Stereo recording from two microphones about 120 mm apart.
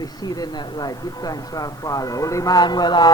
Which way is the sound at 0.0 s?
35° left (ahead or behind).